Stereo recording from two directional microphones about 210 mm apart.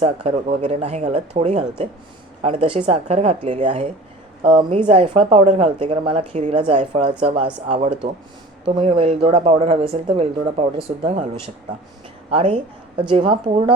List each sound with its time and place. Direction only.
0.0 s speech: 35° right (ahead or behind)